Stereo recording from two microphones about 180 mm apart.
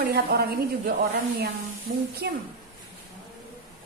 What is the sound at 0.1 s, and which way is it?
Speech, 60° right (ahead or behind).